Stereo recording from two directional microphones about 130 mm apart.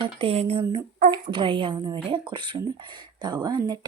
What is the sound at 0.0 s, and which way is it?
Speech, 45° right (ahead or behind).